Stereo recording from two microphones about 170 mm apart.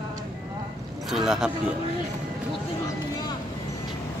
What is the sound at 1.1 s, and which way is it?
Speech, 5° right (ahead or behind).